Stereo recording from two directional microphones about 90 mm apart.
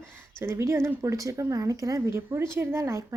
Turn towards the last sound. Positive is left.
turn(degrees=-30)  # may be behind; listen again after turning